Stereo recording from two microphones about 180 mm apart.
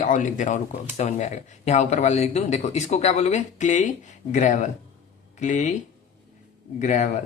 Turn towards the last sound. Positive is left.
turn(degrees=40)  # may be behind; listen again after turning